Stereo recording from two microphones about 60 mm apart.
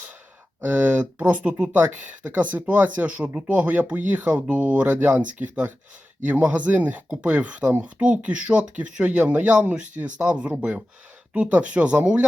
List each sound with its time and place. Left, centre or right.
0.6 s speech: right